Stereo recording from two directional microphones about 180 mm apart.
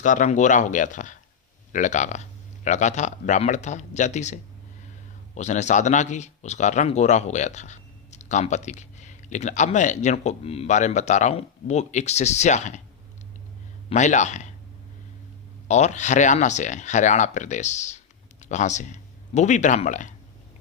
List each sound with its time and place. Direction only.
0.0 s a man's voice: 45° left (ahead or behind)
13.9 s a man's voice: 40° left (ahead or behind)
15.6 s speech: 40° left (ahead or behind)